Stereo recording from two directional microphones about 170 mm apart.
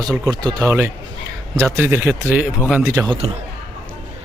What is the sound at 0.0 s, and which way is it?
Speech, 25° right (ahead or behind).